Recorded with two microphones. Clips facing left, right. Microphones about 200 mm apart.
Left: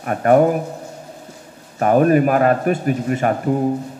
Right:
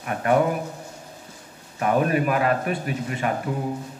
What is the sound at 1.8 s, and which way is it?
A man's voice, 45° left (ahead or behind).